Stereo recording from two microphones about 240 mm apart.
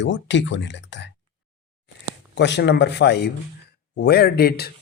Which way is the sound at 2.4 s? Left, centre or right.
Left.